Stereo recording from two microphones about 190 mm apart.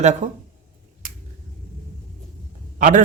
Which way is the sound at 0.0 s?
40° right (ahead or behind).